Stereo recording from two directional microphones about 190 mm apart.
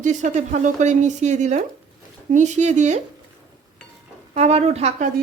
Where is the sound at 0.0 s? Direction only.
40° right (ahead or behind).